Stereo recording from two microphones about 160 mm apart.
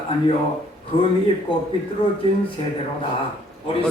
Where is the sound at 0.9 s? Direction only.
35° left (ahead or behind).